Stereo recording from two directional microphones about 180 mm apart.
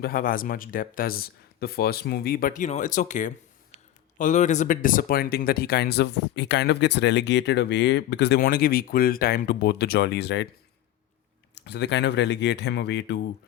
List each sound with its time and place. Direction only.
0.0 s speech: 50° left (ahead or behind); by 10.4 s 70° left (ahead or behind)
11.5 s speech: 70° left (ahead or behind)